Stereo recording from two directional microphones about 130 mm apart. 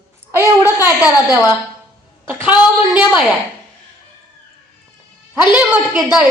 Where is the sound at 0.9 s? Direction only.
15° right (ahead or behind).